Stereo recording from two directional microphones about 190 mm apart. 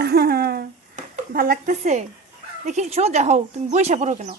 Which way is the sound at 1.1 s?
50° right (ahead or behind).